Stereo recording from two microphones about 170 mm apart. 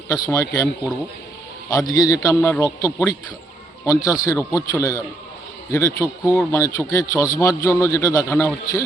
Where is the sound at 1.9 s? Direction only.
20° left (ahead or behind).